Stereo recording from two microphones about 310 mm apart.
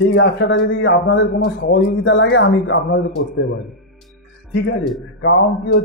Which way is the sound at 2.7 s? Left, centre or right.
Left.